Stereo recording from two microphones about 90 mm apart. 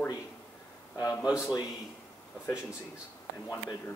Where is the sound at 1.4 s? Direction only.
40° left (ahead or behind).